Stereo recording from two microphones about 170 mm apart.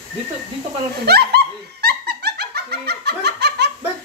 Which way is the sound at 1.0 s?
70° right (ahead or behind).